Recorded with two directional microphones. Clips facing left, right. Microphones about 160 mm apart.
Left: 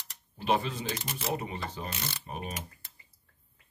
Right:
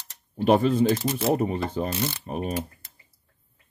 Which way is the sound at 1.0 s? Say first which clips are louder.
Right 11 dB; 40° right (ahead or behind).